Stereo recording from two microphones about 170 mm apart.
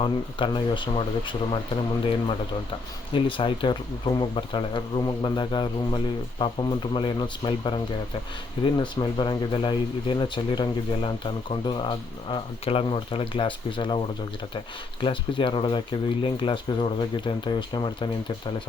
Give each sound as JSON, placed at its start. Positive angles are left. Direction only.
{"t": 0.0, "sound": "speech", "side_deg": 30}
{"t": 15.0, "sound": "speech", "side_deg": 30}